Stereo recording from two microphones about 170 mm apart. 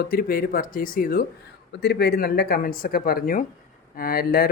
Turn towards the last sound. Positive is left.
turn(degrees=65)  # may be behind; listen again after turning